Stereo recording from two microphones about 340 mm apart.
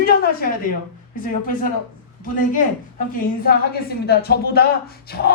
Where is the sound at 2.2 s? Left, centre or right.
Left.